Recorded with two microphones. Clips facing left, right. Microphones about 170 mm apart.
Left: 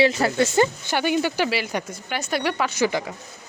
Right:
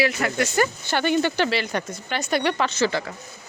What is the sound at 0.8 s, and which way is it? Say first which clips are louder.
Speech: right 1 dB; 10° left (ahead or behind).